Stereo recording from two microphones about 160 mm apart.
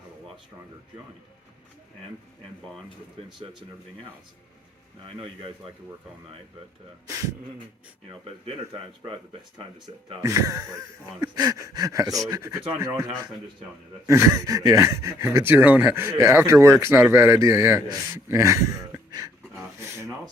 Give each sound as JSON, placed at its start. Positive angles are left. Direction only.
{"t": 8.1, "sound": "speech", "side_deg": -35}
{"t": 10.2, "sound": "speech", "side_deg": -20}
{"t": 19.8, "sound": "a sound", "side_deg": -15}